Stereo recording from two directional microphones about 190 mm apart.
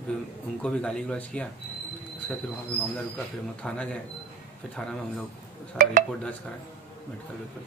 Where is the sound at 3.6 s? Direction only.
5° left (ahead or behind).